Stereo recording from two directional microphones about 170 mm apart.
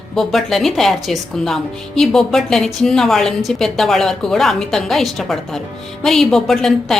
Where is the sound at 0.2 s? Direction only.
Centre (ahead or behind).